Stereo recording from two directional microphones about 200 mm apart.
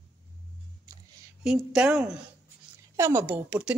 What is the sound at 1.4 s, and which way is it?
A woman's voice, centre (ahead or behind).